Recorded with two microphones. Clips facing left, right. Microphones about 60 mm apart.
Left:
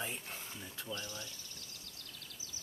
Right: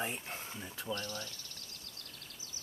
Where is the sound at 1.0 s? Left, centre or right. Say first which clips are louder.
Right 4 dB; centre.